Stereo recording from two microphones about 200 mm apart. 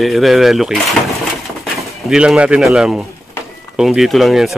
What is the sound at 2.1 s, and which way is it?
A man's voice, 5° right (ahead or behind).